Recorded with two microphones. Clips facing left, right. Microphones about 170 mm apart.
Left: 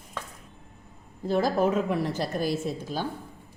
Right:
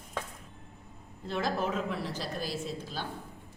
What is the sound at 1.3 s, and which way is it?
A woman's voice, 40° left (ahead or behind).